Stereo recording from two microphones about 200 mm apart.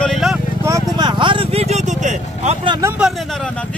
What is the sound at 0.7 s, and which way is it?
Speech, 20° right (ahead or behind).